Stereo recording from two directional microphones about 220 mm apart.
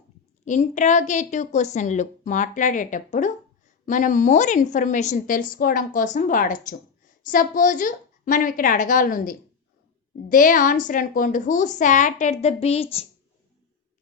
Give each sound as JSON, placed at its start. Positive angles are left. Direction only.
{"t": 0.4, "sound": "a woman's voice", "side_deg": 35}